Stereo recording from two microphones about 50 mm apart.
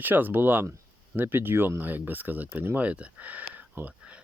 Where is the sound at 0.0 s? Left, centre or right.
Right.